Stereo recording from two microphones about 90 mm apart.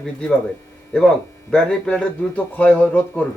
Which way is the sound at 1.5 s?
10° left (ahead or behind).